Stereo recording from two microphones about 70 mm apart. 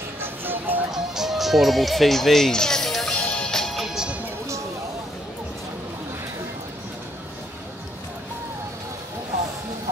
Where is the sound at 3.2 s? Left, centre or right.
Centre.